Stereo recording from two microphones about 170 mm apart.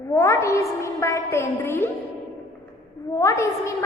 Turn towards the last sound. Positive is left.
turn(degrees=15)  # may be behind; listen again after turning